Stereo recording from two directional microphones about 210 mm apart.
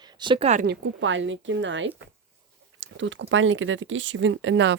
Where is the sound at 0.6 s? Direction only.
65° right (ahead or behind).